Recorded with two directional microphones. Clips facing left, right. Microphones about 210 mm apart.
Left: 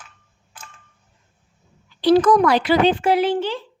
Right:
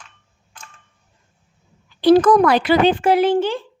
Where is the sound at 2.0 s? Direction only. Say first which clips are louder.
Right 2 dB; 50° right (ahead or behind).